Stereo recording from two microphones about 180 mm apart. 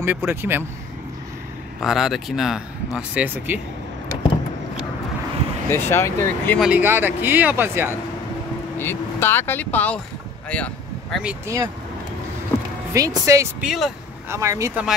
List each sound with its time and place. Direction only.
0.0 s speech: 10° right (ahead or behind)
1.8 s speech: centre (ahead or behind)
5.7 s speech: 15° left (ahead or behind)
6.6 s speech: 10° right (ahead or behind)
8.7 s speech: 15° left (ahead or behind)
11.4 s speech: 15° right (ahead or behind)
12.9 s speech: 20° right (ahead or behind)
13.6 s speech: centre (ahead or behind)
14.3 s speech: 15° right (ahead or behind)